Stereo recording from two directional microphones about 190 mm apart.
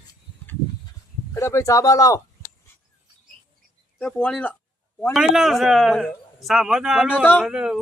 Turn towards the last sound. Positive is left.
turn(degrees=-5)  # may be behind; listen again after turning